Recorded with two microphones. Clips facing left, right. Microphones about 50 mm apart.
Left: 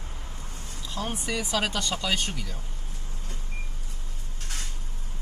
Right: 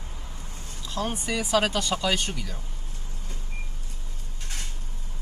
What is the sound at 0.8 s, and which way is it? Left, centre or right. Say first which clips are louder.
Speech: right 3 dB; centre.